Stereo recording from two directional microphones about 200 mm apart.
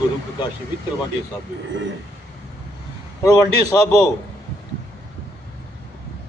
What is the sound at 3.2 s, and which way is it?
Speech, 20° left (ahead or behind).